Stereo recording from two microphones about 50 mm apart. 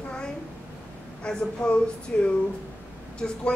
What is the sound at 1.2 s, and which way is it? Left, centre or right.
A woman's voice, centre.